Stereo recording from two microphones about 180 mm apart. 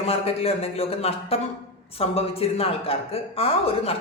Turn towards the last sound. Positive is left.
turn(degrees=35)  # may be behind; listen again after turning